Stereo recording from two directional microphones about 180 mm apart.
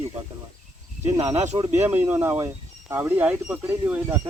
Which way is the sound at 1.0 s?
15° right (ahead or behind).